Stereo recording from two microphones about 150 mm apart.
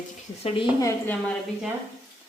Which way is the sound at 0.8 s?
20° left (ahead or behind).